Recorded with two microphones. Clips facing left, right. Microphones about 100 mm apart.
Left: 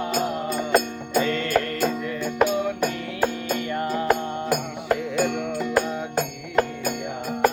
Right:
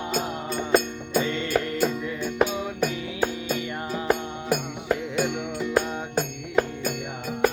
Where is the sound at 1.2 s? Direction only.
15° right (ahead or behind).